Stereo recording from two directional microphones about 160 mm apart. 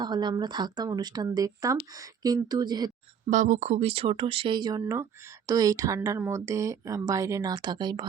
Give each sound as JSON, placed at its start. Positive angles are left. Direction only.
{"t": 0.0, "sound": "speech", "side_deg": -25}
{"t": 3.2, "sound": "speech", "side_deg": -50}